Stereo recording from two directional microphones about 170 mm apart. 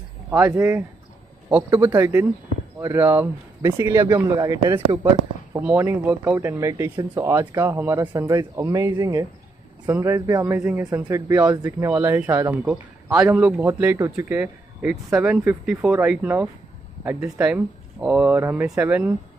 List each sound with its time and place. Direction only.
0.3 s a man's voice: 10° right (ahead or behind)